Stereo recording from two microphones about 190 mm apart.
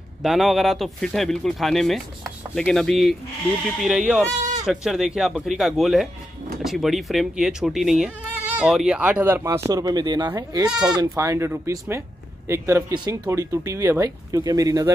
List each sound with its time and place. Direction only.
0.2 s speech: centre (ahead or behind); by 14.9 s 20° right (ahead or behind)